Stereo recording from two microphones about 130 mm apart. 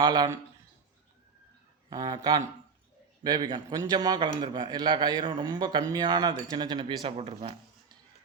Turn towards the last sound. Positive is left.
turn(degrees=-50)  # may be behind; listen again after turning